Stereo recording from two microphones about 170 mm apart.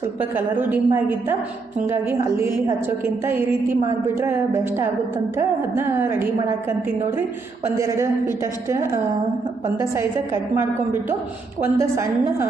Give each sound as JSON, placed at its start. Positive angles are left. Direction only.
{"t": 0.2, "sound": "a woman's voice", "side_deg": -10}
{"t": 7.8, "sound": "a woman's voice", "side_deg": -15}